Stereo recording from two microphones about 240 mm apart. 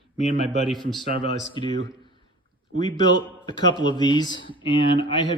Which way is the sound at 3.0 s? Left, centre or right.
Centre.